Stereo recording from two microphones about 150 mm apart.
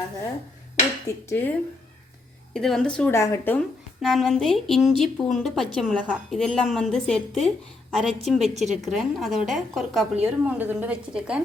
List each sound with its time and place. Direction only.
1.0 s speech: 15° left (ahead or behind)
2.5 s speech: 5° left (ahead or behind)
3.1 s speech: 20° left (ahead or behind)
4.0 s a woman's voice: centre (ahead or behind)